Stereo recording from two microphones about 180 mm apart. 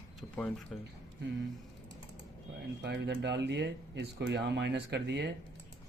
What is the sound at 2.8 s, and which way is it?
Speech, 70° right (ahead or behind).